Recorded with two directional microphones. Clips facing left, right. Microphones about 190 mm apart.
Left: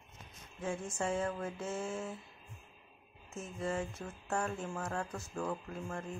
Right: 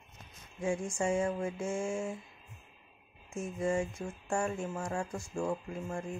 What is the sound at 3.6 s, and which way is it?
Speech, 10° right (ahead or behind).